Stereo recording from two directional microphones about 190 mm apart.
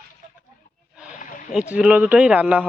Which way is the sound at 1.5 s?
5° right (ahead or behind).